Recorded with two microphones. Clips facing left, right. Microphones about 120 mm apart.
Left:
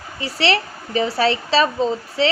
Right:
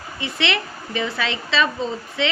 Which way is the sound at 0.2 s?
35° left (ahead or behind).